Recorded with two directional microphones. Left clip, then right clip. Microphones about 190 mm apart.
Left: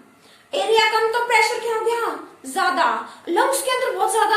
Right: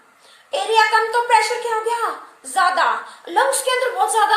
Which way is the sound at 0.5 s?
30° right (ahead or behind).